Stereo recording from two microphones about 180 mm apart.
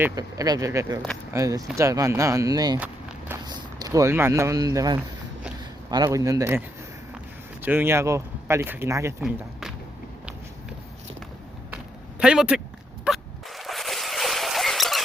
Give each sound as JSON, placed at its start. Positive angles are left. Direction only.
{"t": 0.0, "sound": "speech", "side_deg": -20}
{"t": 2.7, "sound": "walk", "side_deg": -10}
{"t": 3.4, "sound": "speech", "side_deg": -20}
{"t": 7.6, "sound": "speech", "side_deg": -10}
{"t": 9.2, "sound": "speech", "side_deg": 0}
{"t": 12.2, "sound": "speech", "side_deg": -5}
{"t": 13.1, "sound": "a sound", "side_deg": 0}